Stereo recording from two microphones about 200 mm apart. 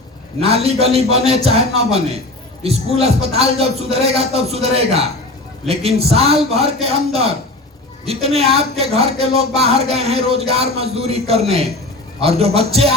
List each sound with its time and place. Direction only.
0.4 s speech: 30° right (ahead or behind)